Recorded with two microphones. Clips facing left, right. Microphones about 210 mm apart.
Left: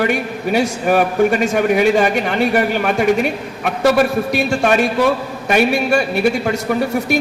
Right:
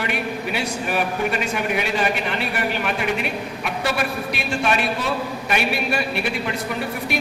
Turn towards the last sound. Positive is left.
turn(degrees=45)  # may be behind; listen again after turning